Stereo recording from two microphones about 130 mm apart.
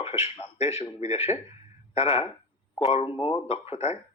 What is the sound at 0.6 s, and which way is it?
Speech, 20° right (ahead or behind).